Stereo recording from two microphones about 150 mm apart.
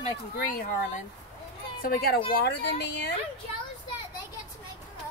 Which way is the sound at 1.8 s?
85° left.